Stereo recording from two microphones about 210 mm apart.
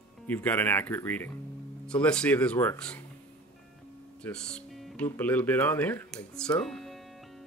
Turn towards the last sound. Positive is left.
turn(degrees=0)  # may be behind; listen again after turning